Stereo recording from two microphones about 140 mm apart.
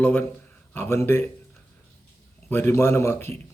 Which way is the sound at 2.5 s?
15° left (ahead or behind).